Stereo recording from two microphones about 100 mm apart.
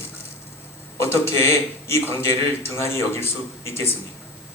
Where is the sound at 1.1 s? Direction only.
25° left (ahead or behind).